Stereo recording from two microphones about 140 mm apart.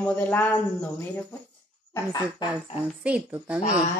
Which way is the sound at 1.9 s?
25° left (ahead or behind).